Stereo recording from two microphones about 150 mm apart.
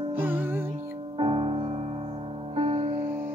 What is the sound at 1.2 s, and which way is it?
Music, 35° right (ahead or behind).